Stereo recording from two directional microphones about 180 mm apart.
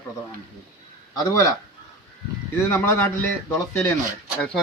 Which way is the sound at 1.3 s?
15° left (ahead or behind).